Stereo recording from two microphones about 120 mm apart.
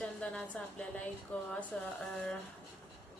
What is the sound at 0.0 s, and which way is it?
A woman's voice, 5° left (ahead or behind).